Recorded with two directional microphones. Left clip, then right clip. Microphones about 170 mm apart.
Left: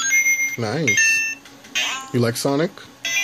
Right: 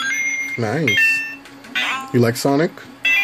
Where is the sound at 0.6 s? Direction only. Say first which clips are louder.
Right 3 dB; centre (ahead or behind).